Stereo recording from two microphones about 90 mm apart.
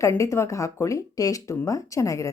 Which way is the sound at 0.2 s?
35° left (ahead or behind).